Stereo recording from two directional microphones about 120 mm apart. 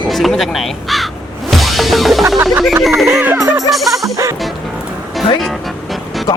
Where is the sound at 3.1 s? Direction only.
20° right (ahead or behind).